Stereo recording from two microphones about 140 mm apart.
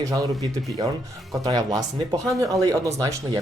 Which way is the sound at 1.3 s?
30° right (ahead or behind).